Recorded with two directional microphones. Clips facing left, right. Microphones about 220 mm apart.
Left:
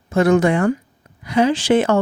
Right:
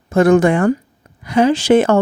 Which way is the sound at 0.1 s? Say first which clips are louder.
Right 3 dB; 50° right (ahead or behind).